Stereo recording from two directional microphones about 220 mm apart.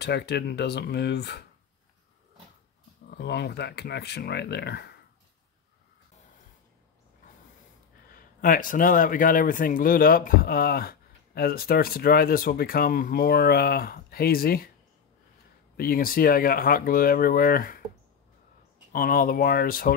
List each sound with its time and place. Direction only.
0.0 s speech: 50° left (ahead or behind)
3.1 s speech: 50° left (ahead or behind)
8.1 s a man's voice: 40° left (ahead or behind)
15.7 s a man's voice: 40° left (ahead or behind)
18.9 s a man's voice: 40° left (ahead or behind)